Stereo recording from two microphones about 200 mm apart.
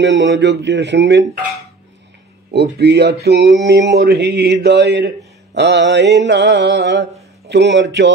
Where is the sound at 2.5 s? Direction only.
55° right (ahead or behind).